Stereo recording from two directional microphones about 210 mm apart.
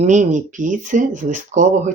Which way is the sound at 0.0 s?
35° right (ahead or behind).